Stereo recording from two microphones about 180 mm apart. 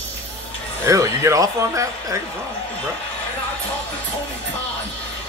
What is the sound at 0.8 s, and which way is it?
Speech, 15° right (ahead or behind).